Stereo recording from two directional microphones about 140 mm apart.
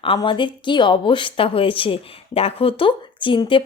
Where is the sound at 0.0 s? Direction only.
40° left (ahead or behind).